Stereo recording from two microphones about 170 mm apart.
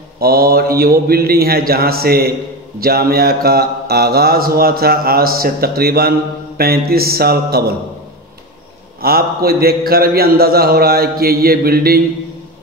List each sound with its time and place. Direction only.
0.2 s mantra: 60° right (ahead or behind)
9.0 s mantra: 65° right (ahead or behind)